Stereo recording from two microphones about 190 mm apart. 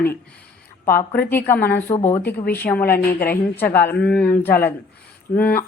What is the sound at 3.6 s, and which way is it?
Speech, 10° left (ahead or behind).